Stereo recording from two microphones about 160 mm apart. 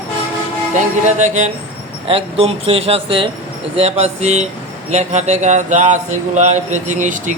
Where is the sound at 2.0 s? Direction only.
35° right (ahead or behind).